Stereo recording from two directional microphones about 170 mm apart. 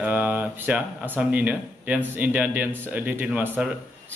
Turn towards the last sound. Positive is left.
turn(degrees=-10)  # may be behind; listen again after turning